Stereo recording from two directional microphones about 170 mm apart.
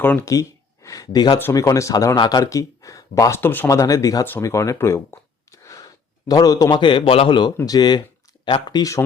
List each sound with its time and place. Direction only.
0.0 s speech: 15° left (ahead or behind)